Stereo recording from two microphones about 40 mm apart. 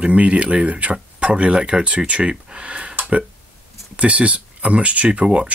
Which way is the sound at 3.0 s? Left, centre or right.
Right.